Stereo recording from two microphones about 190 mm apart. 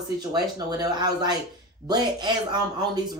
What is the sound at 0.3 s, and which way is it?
Speech, 20° right (ahead or behind).